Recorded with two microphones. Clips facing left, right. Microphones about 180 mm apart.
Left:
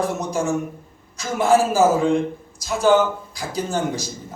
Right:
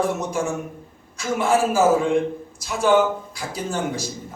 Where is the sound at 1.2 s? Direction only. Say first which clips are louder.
Left 2 dB; 40° left (ahead or behind).